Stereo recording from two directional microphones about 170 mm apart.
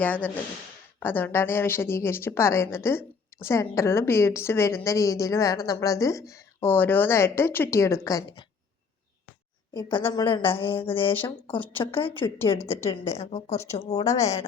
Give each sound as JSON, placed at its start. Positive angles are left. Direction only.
{"t": 0.0, "sound": "a woman's voice", "side_deg": 10}
{"t": 9.7, "sound": "a woman's voice", "side_deg": 30}
{"t": 12.5, "sound": "a woman's voice", "side_deg": 15}
{"t": 13.1, "sound": "a woman's voice", "side_deg": 40}
{"t": 14.0, "sound": "a woman's voice", "side_deg": 20}